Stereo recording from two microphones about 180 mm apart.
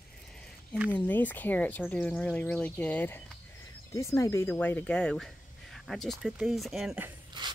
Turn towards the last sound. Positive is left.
turn(degrees=-25)  # may be behind; listen again after turning